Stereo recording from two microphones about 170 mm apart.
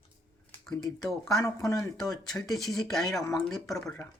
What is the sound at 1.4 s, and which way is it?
Speech, 20° left (ahead or behind).